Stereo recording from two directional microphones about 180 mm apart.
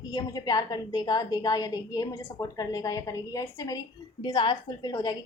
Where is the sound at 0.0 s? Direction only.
20° left (ahead or behind).